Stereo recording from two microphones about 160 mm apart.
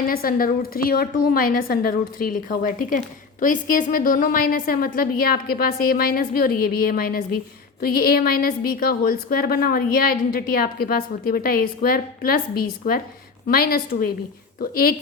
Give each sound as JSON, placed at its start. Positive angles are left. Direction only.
{"t": 0.1, "sound": "a woman's voice", "side_deg": 65}